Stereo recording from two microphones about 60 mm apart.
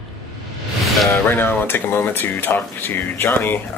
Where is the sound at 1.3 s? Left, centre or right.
Left.